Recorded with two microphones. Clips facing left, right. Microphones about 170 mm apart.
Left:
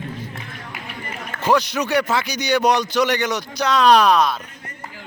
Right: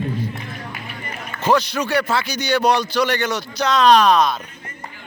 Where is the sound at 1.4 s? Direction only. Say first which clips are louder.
Even; 15° left (ahead or behind).